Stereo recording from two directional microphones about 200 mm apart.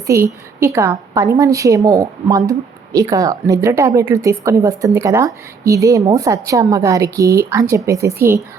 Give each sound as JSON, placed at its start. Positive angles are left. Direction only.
{"t": 0.1, "sound": "a woman's voice", "side_deg": -15}